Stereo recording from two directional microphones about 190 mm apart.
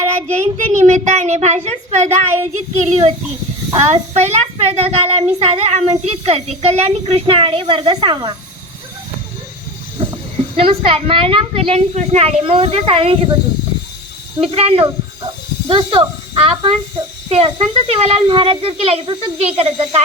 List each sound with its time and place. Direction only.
0.2 s a child's voice: 35° right (ahead or behind)
10.0 s a sound: 30° right (ahead or behind)
10.6 s speech: 30° right (ahead or behind)
14.4 s a child's voice: 30° right (ahead or behind)